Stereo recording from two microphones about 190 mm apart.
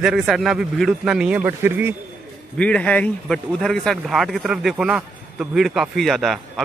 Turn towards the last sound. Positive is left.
turn(degrees=0)  # may be behind; listen again after turning